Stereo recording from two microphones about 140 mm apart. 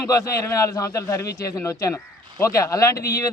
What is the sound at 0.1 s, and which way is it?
Speech, 25° left (ahead or behind).